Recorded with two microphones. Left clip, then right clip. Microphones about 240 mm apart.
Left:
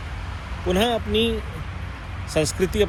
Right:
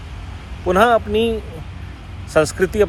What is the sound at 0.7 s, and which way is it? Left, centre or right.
Speech, right.